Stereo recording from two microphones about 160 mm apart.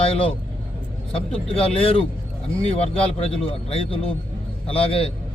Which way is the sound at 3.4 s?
40° left (ahead or behind).